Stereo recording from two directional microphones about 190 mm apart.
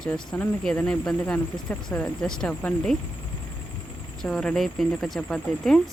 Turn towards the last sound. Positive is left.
turn(degrees=0)  # may be behind; listen again after turning